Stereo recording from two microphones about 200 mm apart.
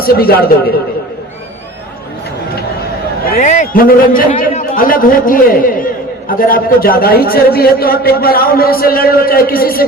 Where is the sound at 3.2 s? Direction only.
45° left (ahead or behind).